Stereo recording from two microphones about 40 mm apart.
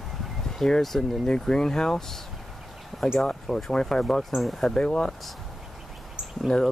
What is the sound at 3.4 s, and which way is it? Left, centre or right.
Speech, centre.